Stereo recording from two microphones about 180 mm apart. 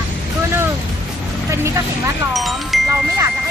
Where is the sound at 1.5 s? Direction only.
15° right (ahead or behind).